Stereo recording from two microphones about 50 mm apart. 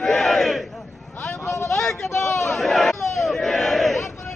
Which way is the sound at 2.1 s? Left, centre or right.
Left.